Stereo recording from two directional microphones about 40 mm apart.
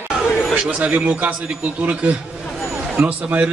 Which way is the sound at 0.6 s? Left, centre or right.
Right.